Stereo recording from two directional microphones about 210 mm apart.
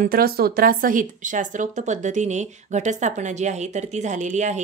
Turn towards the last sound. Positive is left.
turn(degrees=-35)  # may be behind; listen again after turning